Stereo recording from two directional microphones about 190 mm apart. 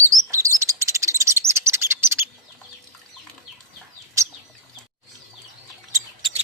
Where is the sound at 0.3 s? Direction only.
15° right (ahead or behind).